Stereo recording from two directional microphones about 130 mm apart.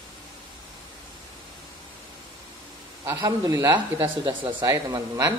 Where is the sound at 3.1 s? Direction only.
25° right (ahead or behind).